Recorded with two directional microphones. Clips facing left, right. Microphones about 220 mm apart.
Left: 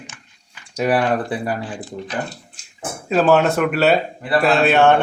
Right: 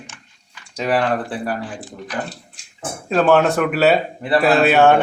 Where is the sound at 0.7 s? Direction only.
10° left (ahead or behind).